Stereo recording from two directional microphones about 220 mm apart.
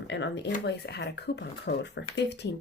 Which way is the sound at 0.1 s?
50° left (ahead or behind).